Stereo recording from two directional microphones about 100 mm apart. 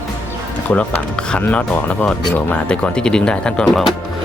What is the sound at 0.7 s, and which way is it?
Speech, 10° left (ahead or behind).